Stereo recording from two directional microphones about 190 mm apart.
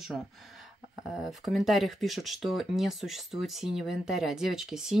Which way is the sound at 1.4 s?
Centre (ahead or behind).